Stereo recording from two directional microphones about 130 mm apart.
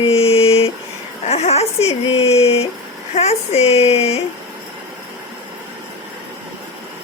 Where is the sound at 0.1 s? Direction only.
50° left (ahead or behind).